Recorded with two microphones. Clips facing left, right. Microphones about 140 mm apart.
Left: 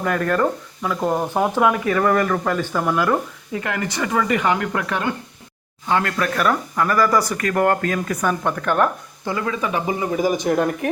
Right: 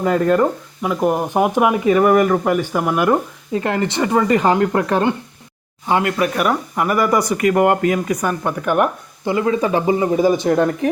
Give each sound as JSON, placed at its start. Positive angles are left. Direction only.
{"t": 0.0, "sound": "speech", "side_deg": -20}
{"t": 5.9, "sound": "speech", "side_deg": -15}